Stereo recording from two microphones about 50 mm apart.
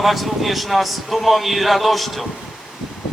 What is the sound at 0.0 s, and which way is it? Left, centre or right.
A man's voice, centre.